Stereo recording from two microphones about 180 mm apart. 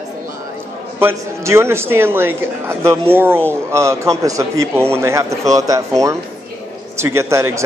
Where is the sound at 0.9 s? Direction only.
15° right (ahead or behind).